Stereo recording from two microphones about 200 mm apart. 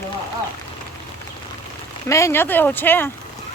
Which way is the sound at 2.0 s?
15° left (ahead or behind).